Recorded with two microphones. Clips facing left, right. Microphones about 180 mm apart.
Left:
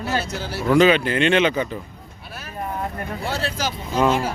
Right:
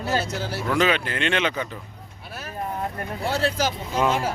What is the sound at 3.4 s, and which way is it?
Speech, 50° right (ahead or behind).